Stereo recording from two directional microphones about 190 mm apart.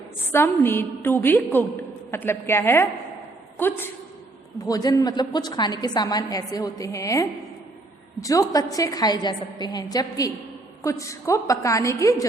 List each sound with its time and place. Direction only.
0.3 s a woman's voice: 10° left (ahead or behind)